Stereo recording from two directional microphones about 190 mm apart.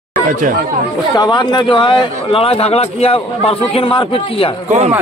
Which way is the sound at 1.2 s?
25° left (ahead or behind).